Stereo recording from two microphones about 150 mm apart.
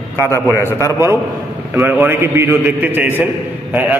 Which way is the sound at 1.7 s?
15° right (ahead or behind).